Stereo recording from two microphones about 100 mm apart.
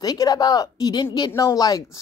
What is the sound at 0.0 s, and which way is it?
Speech, 40° left (ahead or behind).